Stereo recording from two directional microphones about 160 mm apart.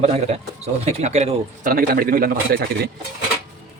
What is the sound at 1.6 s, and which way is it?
A man's voice, 65° right (ahead or behind).